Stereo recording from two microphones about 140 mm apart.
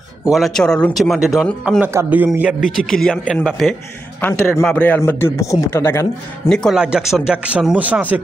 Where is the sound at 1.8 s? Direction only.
15° right (ahead or behind).